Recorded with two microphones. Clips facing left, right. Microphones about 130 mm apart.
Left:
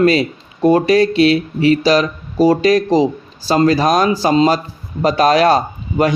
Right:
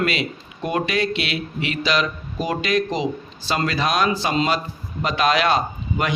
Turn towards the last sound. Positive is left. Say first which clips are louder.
# left 8 dB
turn(degrees=40)  # may be behind; listen again after turning